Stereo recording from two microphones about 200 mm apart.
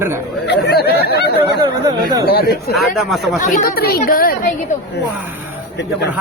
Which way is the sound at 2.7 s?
Centre (ahead or behind).